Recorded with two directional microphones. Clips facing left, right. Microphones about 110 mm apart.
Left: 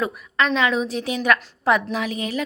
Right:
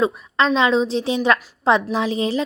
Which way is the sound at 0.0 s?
30° right (ahead or behind).